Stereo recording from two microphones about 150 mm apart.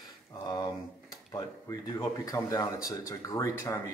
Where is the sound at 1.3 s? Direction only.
20° left (ahead or behind).